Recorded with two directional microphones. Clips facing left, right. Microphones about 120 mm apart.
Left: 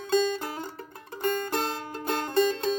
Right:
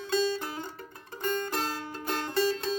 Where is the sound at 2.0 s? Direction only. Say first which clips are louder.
Left 3 dB; 35° left (ahead or behind).